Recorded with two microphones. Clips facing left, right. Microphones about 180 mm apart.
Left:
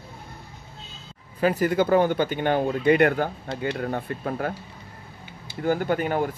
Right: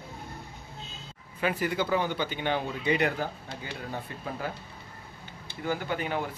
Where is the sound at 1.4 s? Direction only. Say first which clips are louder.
Left 7 dB; 45° left (ahead or behind).